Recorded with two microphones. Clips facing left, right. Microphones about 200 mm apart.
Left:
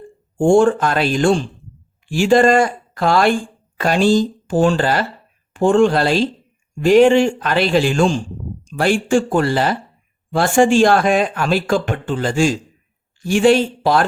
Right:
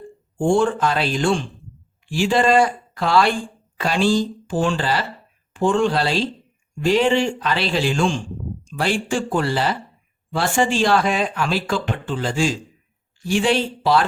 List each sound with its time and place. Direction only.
0.3 s speech: 45° left (ahead or behind)